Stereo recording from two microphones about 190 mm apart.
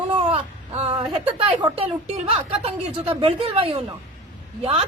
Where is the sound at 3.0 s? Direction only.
30° right (ahead or behind).